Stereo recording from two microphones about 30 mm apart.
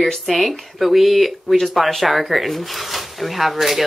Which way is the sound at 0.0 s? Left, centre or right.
Centre.